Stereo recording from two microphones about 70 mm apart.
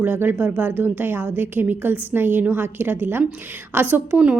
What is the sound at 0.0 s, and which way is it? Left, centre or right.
A woman's voice, right.